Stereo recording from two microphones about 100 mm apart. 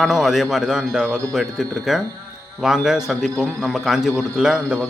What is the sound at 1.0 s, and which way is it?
Speech, 15° left (ahead or behind).